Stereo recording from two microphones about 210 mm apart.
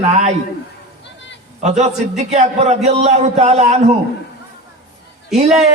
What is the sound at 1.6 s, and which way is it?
A man's voice, 35° right (ahead or behind).